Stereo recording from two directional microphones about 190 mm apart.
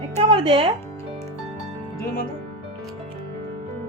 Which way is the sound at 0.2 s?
30° right (ahead or behind).